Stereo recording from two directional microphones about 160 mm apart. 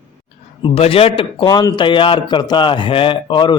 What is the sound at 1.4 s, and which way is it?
A man's voice, 25° left (ahead or behind).